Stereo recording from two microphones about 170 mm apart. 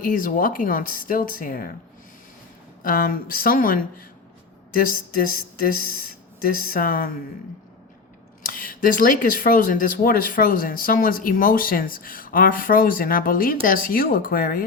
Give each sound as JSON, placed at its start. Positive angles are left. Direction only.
{"t": 0.0, "sound": "speech", "side_deg": 55}
{"t": 2.8, "sound": "speech", "side_deg": 55}
{"t": 8.4, "sound": "speech", "side_deg": 55}